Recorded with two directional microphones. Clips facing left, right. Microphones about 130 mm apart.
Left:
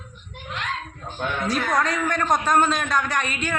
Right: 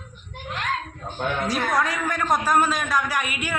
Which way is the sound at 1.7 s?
5° right (ahead or behind).